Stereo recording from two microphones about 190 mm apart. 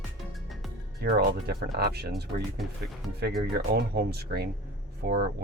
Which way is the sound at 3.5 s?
55° right (ahead or behind).